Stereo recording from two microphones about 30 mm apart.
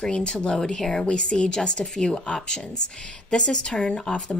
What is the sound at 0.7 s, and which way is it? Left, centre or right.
Speech, centre.